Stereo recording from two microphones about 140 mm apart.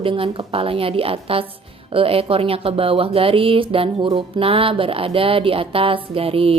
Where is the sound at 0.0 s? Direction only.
40° right (ahead or behind).